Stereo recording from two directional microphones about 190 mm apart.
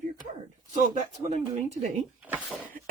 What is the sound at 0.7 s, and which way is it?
Speech, 40° right (ahead or behind).